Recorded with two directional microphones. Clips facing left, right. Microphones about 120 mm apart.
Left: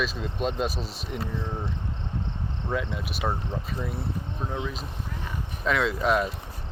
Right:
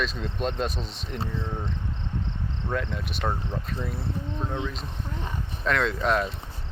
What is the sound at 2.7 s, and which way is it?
Speech, 5° left (ahead or behind).